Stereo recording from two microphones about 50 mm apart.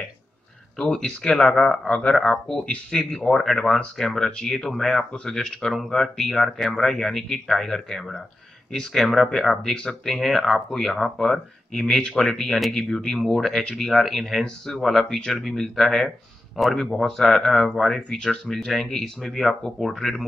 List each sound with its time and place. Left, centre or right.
0.9 s speech: centre
2.6 s speech: left
3.2 s speech: centre
18.1 s speech: centre